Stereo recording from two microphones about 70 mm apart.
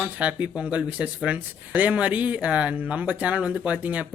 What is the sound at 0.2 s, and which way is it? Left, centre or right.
Speech, centre.